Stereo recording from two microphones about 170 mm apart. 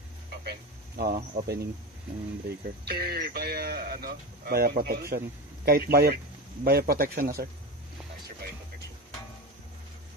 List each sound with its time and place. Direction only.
0.5 s speech: 65° right (ahead or behind)
2.8 s speech: 65° right (ahead or behind)